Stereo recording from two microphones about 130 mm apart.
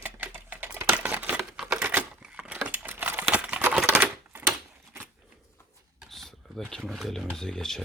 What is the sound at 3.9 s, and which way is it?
Typewriter, 15° right (ahead or behind).